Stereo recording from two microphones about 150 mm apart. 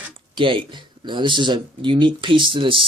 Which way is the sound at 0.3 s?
35° right (ahead or behind).